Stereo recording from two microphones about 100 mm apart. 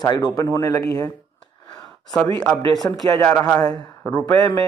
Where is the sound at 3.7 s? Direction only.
45° left (ahead or behind).